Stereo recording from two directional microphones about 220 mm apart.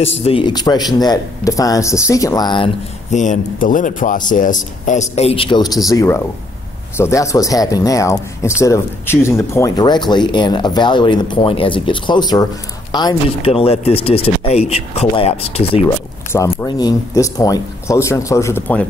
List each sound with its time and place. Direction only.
0.2 s speech: 25° left (ahead or behind)
3.1 s a man's voice: 35° left (ahead or behind)
16.3 s speech: 15° left (ahead or behind)